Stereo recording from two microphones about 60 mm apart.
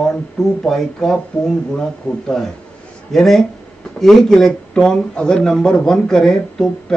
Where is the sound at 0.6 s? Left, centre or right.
Centre.